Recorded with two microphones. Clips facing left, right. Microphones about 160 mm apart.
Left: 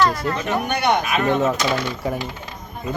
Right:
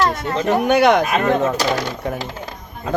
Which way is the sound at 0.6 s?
90° right.